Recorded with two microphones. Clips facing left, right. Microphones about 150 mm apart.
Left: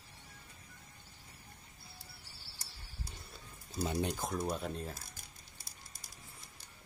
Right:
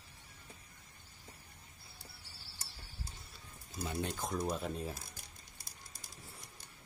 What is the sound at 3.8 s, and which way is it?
Speech, 20° left (ahead or behind).